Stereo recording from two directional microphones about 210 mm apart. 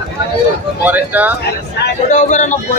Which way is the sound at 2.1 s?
35° left (ahead or behind).